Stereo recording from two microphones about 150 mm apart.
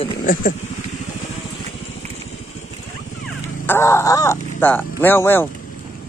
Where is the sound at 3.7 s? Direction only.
20° left (ahead or behind).